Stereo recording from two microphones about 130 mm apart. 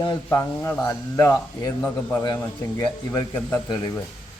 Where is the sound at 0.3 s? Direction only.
20° left (ahead or behind).